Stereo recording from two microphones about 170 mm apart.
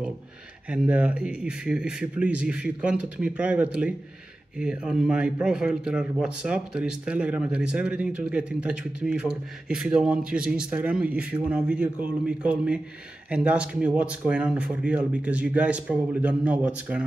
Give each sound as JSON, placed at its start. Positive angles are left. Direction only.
{"t": 0.7, "sound": "a man's voice", "side_deg": -5}